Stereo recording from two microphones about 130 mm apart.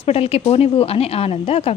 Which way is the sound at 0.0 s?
50° left (ahead or behind).